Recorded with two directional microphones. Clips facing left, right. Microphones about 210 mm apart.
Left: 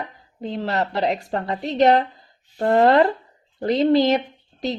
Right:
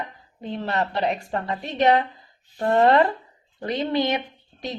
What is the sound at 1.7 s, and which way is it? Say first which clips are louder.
A woman's voice: left 3 dB; 35° left (ahead or behind).